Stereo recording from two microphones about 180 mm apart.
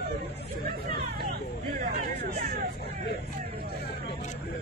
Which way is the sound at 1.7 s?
50° right (ahead or behind).